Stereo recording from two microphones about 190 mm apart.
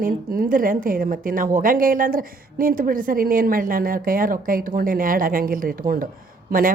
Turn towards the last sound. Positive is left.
turn(degrees=-50)  # may be behind; listen again after turning